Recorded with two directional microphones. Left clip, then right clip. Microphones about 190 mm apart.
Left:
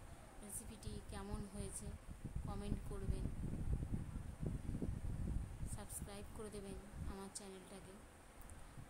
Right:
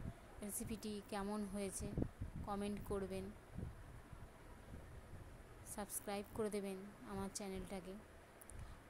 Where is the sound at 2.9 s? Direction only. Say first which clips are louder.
Right 9 dB; 35° right (ahead or behind).